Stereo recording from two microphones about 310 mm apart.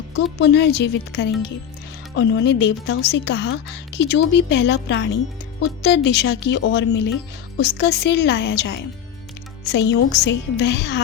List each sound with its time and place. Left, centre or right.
0.3 s a woman's voice: left